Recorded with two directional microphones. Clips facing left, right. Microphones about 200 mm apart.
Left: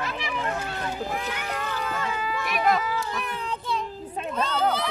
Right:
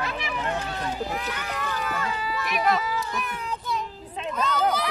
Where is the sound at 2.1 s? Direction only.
50° left (ahead or behind).